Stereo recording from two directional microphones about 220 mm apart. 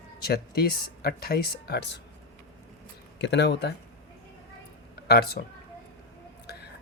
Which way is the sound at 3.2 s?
50° left (ahead or behind).